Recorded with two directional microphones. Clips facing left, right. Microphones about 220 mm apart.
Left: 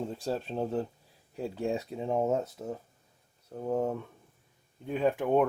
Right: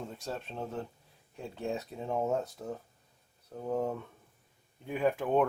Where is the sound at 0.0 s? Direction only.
30° left (ahead or behind).